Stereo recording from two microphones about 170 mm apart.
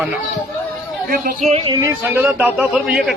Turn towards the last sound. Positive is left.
turn(degrees=-5)  # may be behind; listen again after turning